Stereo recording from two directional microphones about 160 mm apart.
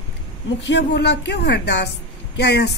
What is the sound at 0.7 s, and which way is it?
A woman's voice, 90° left.